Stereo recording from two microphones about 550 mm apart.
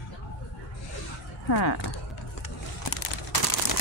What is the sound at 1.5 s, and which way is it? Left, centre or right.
Speech, left.